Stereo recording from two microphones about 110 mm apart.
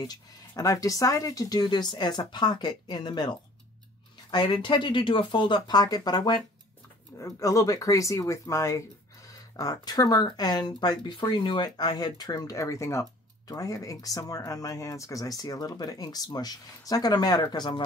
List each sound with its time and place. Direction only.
0.0 s speech: 35° left (ahead or behind)